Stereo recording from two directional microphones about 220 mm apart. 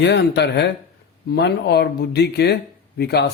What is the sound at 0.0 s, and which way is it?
Speech, 50° left (ahead or behind).